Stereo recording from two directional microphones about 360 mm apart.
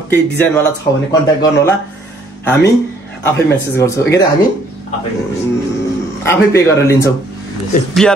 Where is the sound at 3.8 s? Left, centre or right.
Centre.